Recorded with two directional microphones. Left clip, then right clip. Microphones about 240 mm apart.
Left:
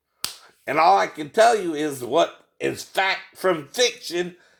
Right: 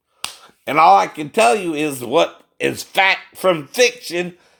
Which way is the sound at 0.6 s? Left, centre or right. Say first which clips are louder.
Right 6 dB; right.